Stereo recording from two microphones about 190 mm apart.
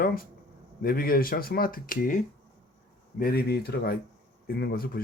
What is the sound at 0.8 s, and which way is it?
Speech, 50° left (ahead or behind).